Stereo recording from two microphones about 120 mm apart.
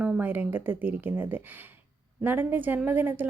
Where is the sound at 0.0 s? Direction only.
15° right (ahead or behind).